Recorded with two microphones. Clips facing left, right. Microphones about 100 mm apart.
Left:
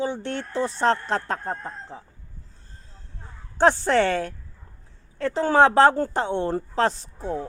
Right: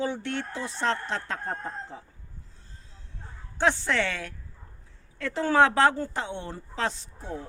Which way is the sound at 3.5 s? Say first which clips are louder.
Left 7 dB; 40° left (ahead or behind).